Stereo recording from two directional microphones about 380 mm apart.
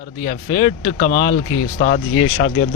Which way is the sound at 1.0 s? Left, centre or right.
Left.